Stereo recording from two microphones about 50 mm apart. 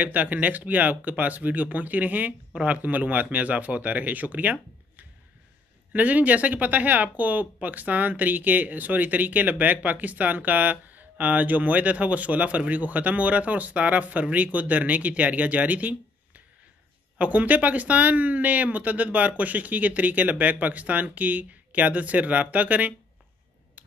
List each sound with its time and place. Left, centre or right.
0.0 s speech: right